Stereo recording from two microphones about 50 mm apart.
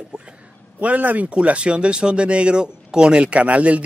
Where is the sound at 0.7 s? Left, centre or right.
Right.